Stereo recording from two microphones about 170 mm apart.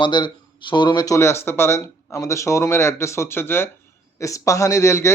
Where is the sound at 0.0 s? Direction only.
25° left (ahead or behind).